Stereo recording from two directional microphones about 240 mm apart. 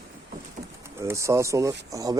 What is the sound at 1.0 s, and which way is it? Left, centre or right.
Speech, centre.